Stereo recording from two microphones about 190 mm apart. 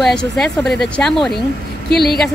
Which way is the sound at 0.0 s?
5° left (ahead or behind).